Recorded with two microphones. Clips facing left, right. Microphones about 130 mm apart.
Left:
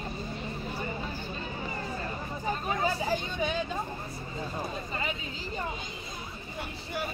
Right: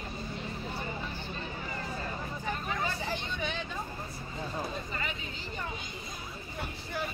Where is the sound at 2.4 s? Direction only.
35° left (ahead or behind).